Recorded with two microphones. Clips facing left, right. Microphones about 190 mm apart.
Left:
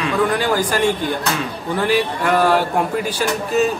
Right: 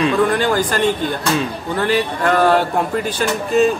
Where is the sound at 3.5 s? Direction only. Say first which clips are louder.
Right 3 dB; 5° left (ahead or behind).